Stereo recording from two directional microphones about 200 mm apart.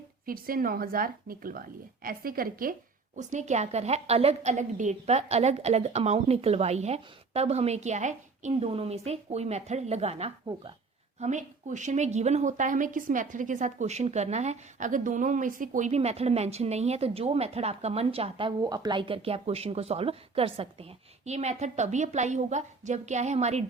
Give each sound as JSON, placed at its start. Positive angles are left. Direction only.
{"t": 0.3, "sound": "a woman's voice", "side_deg": -45}